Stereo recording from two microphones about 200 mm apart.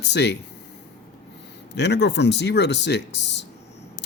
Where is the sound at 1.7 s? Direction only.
60° left (ahead or behind).